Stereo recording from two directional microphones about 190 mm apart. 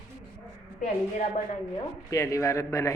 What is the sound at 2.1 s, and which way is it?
Speech, 15° left (ahead or behind).